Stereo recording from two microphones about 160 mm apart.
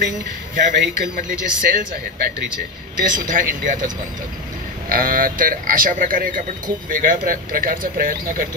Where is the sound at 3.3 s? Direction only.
55° right (ahead or behind).